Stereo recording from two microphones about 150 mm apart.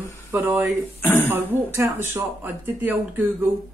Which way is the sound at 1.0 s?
10° left (ahead or behind).